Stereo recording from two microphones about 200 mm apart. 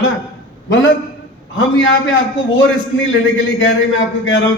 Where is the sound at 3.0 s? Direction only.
70° left (ahead or behind).